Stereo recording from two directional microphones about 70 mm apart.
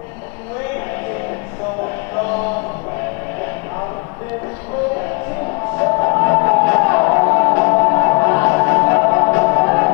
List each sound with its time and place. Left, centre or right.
2.1 s music: left
5.8 s music: left